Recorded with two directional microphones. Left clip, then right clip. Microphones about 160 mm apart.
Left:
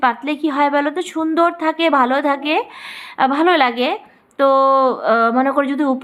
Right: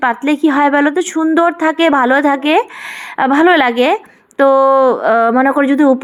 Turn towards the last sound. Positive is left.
turn(degrees=-30)  # may be behind; listen again after turning